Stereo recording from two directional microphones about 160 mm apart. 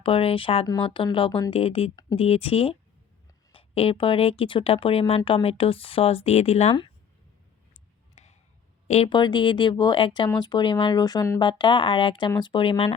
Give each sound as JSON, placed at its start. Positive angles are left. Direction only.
{"t": 0.0, "sound": "speech", "side_deg": 35}
{"t": 7.7, "sound": "a sound", "side_deg": 45}
{"t": 8.9, "sound": "speech", "side_deg": 35}